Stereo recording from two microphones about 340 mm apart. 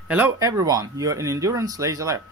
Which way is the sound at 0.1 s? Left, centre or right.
Centre.